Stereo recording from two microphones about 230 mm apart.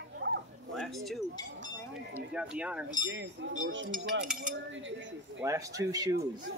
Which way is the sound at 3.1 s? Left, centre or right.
Right.